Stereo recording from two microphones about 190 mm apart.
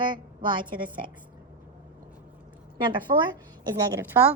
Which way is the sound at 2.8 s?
25° right (ahead or behind).